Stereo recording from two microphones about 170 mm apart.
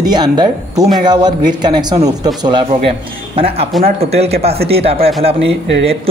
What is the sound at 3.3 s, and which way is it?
A man's voice, 35° right (ahead or behind).